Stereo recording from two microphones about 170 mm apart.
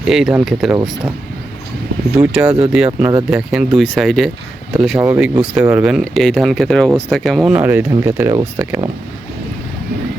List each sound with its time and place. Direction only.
0.0 s speech: 5° right (ahead or behind)
2.1 s speech: 10° right (ahead or behind)
4.9 s speech: 15° right (ahead or behind)